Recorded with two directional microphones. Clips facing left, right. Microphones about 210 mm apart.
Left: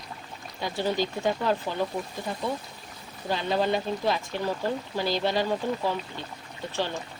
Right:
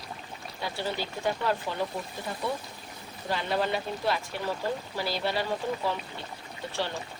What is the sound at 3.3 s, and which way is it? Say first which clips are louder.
Speech: left 3 dB; 15° left (ahead or behind).